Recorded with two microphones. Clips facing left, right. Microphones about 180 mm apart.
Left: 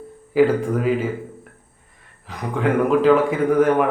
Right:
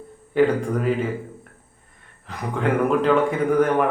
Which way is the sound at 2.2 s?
Centre (ahead or behind).